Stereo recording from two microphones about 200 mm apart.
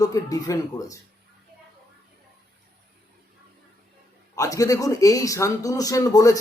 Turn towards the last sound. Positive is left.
turn(degrees=15)  # may be behind; listen again after turning